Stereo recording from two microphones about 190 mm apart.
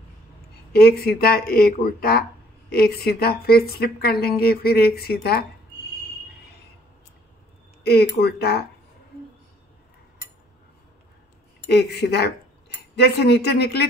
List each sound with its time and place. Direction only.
0.7 s a woman's voice: 55° left (ahead or behind)
7.8 s a woman's voice: 60° left (ahead or behind)
11.7 s speech: 60° left (ahead or behind)